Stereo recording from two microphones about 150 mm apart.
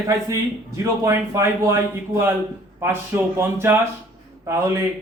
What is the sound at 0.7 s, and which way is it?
Speech, 20° right (ahead or behind).